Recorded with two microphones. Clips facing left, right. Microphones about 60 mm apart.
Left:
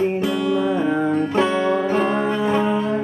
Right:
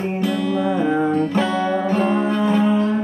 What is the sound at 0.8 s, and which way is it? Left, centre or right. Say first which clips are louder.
Music: right 1 dB; centre.